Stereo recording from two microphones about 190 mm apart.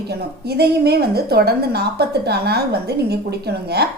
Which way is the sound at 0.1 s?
60° right (ahead or behind).